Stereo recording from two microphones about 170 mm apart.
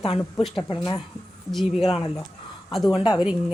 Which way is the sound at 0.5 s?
30° left (ahead or behind).